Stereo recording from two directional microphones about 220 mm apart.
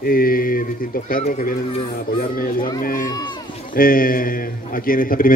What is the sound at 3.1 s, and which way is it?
Speech, 20° left (ahead or behind).